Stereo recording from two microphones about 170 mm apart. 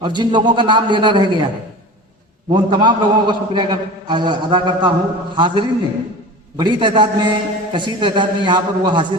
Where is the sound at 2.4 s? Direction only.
25° right (ahead or behind).